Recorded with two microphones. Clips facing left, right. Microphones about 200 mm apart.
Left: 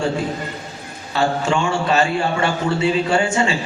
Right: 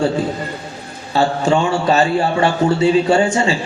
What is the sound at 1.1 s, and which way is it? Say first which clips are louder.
A man's voice: right 4 dB; 35° right (ahead or behind).